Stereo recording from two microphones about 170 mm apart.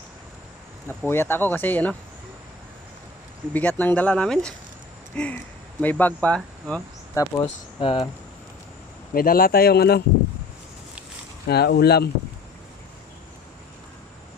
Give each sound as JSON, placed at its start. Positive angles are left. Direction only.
{"t": 0.9, "sound": "speech", "side_deg": 15}
{"t": 3.5, "sound": "speech", "side_deg": 10}
{"t": 7.1, "sound": "speech", "side_deg": 20}
{"t": 7.8, "sound": "speech", "side_deg": 30}
{"t": 9.1, "sound": "speech", "side_deg": 60}
{"t": 11.4, "sound": "speech", "side_deg": 70}